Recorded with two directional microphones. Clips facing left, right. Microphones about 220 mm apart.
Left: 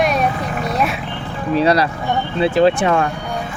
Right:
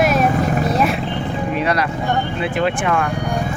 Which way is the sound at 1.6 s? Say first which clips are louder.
Left 7 dB; 35° left (ahead or behind).